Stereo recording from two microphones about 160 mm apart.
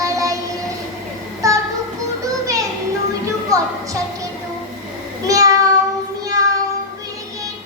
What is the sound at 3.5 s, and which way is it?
Music, 20° right (ahead or behind).